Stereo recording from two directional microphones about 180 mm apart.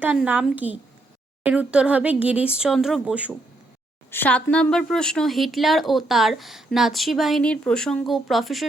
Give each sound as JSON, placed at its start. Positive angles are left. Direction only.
{"t": 0.0, "sound": "speech", "side_deg": -10}
{"t": 4.1, "sound": "speech", "side_deg": 10}